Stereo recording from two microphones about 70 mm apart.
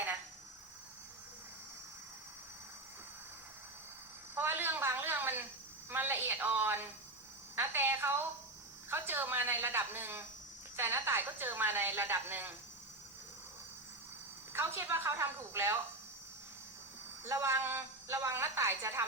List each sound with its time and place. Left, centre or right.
4.4 s a sound: right
5.9 s a woman's voice: right
14.5 s a woman's voice: right
17.2 s a woman's voice: right